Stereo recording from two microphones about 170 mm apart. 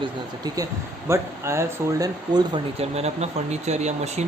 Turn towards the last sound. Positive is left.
turn(degrees=-40)  # may be behind; listen again after turning